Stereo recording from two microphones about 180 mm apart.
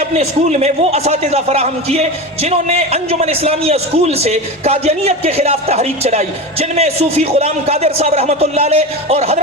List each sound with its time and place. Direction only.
0.2 s a man's voice: 35° right (ahead or behind)